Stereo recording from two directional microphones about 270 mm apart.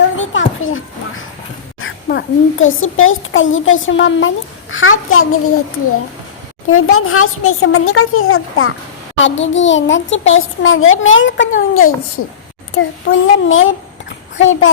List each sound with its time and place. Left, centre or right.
0.2 s a sound: left
1.8 s a child's voice: left
6.7 s a child's voice: left